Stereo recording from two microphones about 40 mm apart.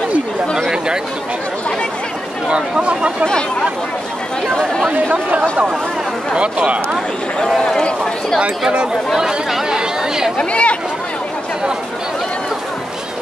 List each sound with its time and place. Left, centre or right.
2.4 s speech: right
5.1 s speech: right
9.1 s speech: centre
10.3 s speech: left